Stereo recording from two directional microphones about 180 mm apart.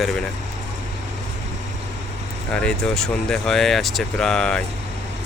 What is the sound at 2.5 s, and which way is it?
Speech, 5° left (ahead or behind).